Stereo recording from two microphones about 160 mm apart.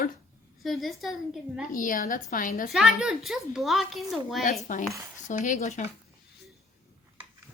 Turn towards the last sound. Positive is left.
turn(degrees=50)  # may be behind; listen again after turning